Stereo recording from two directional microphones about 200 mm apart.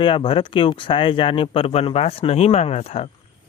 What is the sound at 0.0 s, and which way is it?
Speech, 25° left (ahead or behind).